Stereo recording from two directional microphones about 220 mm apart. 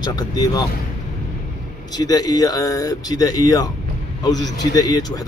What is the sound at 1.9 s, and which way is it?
A man's voice, 15° left (ahead or behind).